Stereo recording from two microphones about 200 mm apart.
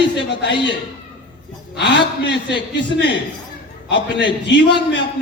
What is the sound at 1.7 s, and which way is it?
Speech, 60° left (ahead or behind).